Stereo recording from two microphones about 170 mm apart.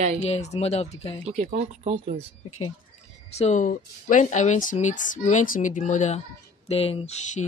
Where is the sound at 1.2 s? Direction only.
45° right (ahead or behind).